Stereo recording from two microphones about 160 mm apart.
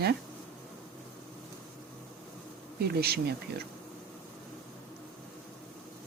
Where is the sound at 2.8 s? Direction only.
80° right.